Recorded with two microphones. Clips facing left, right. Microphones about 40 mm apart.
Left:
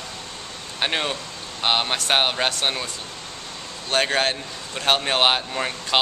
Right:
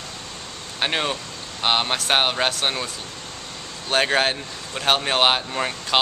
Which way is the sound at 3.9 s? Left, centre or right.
Centre.